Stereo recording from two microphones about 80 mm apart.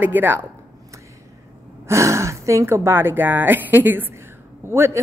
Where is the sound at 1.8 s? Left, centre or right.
Right.